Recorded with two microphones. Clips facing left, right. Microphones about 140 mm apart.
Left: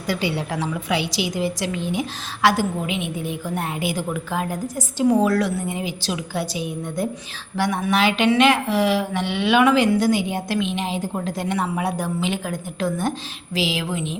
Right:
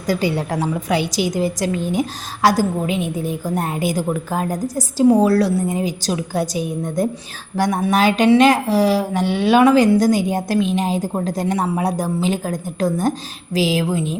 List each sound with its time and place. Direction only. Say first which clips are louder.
0.1 s a woman's voice: right 4 dB; 40° right (ahead or behind)